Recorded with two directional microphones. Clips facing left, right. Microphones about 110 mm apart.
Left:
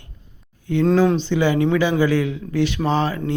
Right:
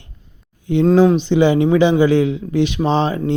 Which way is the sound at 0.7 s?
20° right (ahead or behind).